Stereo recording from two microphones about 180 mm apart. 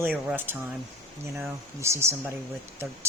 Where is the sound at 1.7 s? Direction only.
15° right (ahead or behind).